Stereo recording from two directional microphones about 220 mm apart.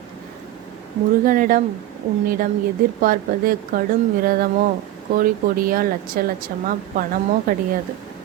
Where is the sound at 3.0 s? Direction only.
40° right (ahead or behind).